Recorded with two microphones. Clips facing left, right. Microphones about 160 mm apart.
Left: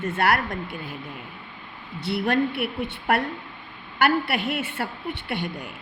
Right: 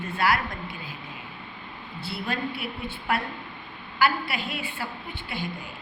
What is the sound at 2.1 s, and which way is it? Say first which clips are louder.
A woman's voice: left 8 dB; 70° left (ahead or behind).